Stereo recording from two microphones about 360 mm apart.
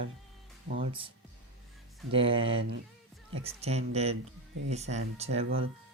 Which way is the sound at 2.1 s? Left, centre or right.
Centre.